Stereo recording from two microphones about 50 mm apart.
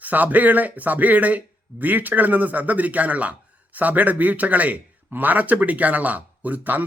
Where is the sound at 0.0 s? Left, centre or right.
Right.